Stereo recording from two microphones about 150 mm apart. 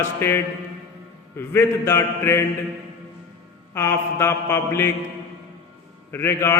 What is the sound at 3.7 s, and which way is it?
Mantra, 15° left (ahead or behind).